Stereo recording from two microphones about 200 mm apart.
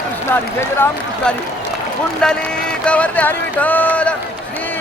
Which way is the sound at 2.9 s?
5° left (ahead or behind).